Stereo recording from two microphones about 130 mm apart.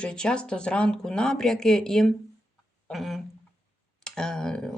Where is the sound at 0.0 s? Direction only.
5° left (ahead or behind).